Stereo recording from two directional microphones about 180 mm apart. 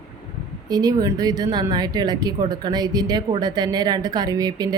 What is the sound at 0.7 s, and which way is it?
Speech, 20° right (ahead or behind).